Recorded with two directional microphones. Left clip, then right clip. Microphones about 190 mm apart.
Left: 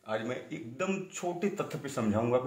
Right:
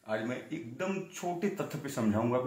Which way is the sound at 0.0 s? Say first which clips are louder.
Left 1 dB; 30° left (ahead or behind).